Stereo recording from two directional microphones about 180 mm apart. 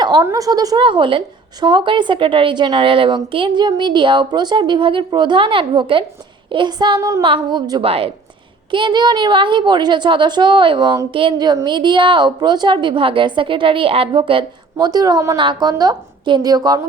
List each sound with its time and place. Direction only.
0.0 s a woman's voice: 20° right (ahead or behind)